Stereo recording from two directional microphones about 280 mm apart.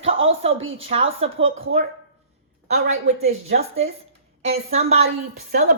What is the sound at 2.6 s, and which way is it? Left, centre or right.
A woman's voice, right.